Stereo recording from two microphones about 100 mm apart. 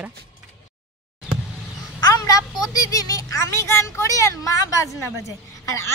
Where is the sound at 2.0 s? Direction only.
40° left (ahead or behind).